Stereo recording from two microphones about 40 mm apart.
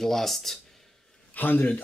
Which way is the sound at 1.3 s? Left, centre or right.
Left.